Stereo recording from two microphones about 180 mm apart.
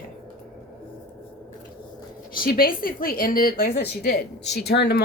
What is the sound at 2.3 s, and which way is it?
Speech, 55° left (ahead or behind).